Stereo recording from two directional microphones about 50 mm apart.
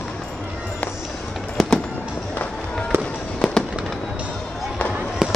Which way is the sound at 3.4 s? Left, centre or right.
Centre.